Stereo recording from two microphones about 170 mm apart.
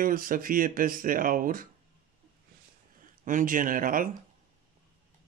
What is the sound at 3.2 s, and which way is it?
Speech, 50° right (ahead or behind).